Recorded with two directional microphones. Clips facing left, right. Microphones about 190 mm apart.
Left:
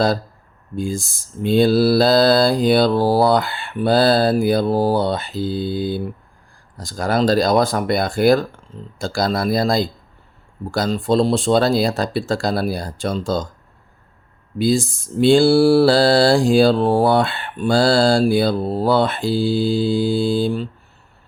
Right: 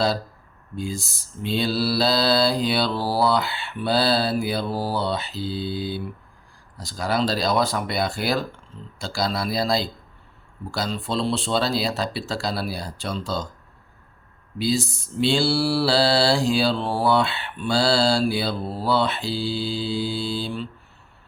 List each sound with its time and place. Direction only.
0.8 s mantra: 50° left (ahead or behind)
14.6 s mantra: 50° left (ahead or behind)